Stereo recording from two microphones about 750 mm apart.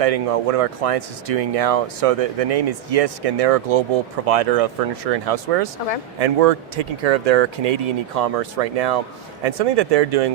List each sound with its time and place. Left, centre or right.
0.0 s speech: right